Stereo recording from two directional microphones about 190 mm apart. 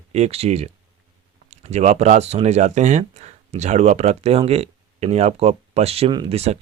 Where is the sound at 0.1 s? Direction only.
35° right (ahead or behind).